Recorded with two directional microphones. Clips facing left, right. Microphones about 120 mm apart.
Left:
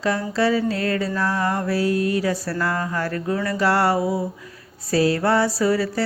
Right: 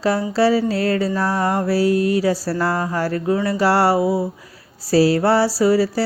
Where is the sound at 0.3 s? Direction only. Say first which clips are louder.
Right 4 dB; 35° right (ahead or behind).